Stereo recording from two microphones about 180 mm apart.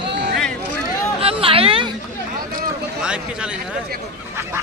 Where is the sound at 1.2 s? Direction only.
30° right (ahead or behind).